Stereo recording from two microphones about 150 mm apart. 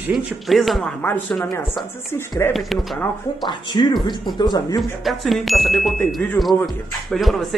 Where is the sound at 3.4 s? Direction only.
30° left (ahead or behind).